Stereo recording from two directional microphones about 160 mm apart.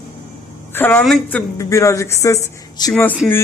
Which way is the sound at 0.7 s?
10° left (ahead or behind).